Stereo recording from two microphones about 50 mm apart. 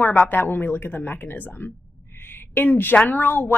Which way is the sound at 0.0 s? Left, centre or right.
Left.